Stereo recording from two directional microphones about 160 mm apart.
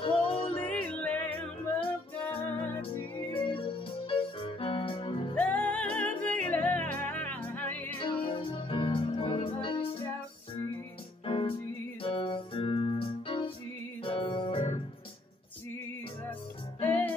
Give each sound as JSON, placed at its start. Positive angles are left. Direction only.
{"t": 0.0, "sound": "music", "side_deg": 35}
{"t": 0.7, "sound": "music", "side_deg": 10}
{"t": 2.5, "sound": "music", "side_deg": 10}
{"t": 3.3, "sound": "music", "side_deg": 35}
{"t": 5.3, "sound": "music", "side_deg": 10}
{"t": 8.0, "sound": "music", "side_deg": 30}
{"t": 11.2, "sound": "music", "side_deg": 35}
{"t": 16.8, "sound": "music", "side_deg": 10}